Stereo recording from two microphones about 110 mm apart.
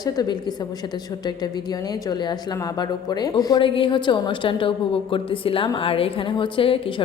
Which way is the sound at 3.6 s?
50° left (ahead or behind).